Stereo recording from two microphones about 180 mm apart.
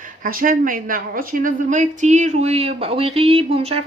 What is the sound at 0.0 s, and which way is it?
Speech, 50° right (ahead or behind).